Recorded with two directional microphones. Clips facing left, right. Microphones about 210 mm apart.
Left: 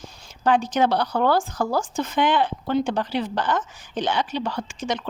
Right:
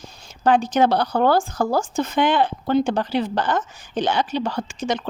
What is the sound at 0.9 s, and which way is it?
Speech, 30° right (ahead or behind).